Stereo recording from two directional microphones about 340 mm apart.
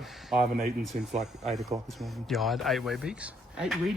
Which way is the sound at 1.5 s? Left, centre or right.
Centre.